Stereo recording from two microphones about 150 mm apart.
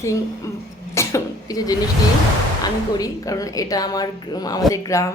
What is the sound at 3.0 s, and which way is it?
A woman's voice, 25° left (ahead or behind).